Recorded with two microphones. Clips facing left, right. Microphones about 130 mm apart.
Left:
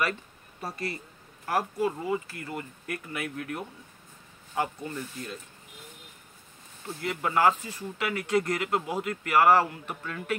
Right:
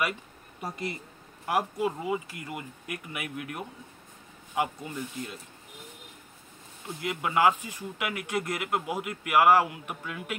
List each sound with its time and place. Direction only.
0.0 s speech: 15° right (ahead or behind)
6.9 s speech: 10° right (ahead or behind)